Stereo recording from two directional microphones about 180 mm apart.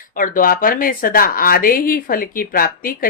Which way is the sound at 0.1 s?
50° left (ahead or behind).